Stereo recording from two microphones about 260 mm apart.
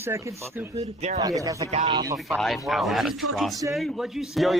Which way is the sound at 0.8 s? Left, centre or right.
Right.